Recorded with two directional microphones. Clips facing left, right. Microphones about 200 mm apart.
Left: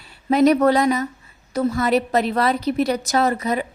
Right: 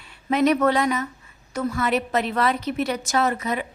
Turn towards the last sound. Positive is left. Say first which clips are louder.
# left 3 dB
turn(degrees=35)  # may be behind; listen again after turning